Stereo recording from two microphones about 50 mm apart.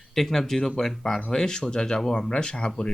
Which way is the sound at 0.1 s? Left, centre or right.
Centre.